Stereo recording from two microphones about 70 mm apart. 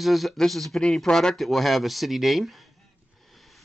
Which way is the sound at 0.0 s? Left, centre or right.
Centre.